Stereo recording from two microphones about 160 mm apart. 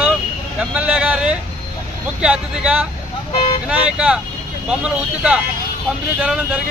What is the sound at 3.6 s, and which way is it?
Speech, 5° right (ahead or behind).